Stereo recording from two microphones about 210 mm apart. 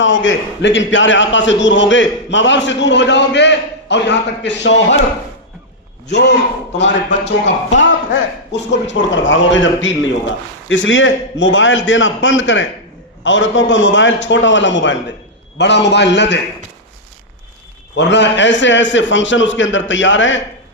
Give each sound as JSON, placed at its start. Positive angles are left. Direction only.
{"t": 0.0, "sound": "a man's voice", "side_deg": 60}
{"t": 6.1, "sound": "a man's voice", "side_deg": 55}
{"t": 17.9, "sound": "a man's voice", "side_deg": 55}